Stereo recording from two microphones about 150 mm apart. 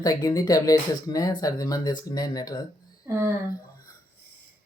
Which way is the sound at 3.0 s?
15° right (ahead or behind).